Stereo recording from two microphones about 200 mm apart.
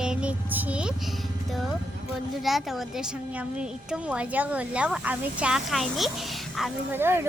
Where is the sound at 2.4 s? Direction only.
Centre (ahead or behind).